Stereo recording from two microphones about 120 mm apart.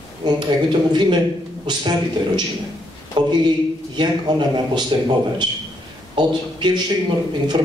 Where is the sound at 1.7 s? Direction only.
40° right (ahead or behind).